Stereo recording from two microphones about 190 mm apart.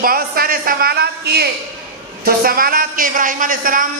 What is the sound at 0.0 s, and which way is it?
A man's voice, 50° right (ahead or behind).